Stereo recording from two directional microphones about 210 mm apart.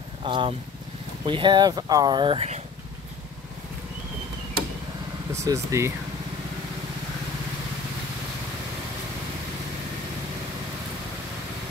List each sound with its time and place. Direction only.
0.2 s speech: 25° right (ahead or behind)
5.3 s speech: 15° right (ahead or behind)